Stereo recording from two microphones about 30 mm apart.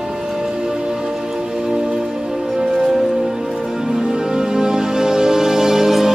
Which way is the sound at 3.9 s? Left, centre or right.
Right.